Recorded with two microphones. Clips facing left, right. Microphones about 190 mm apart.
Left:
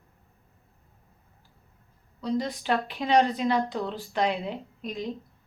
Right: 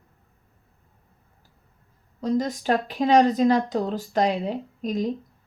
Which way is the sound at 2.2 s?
45° right (ahead or behind).